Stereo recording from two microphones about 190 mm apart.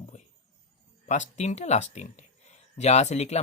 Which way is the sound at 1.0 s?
40° left (ahead or behind).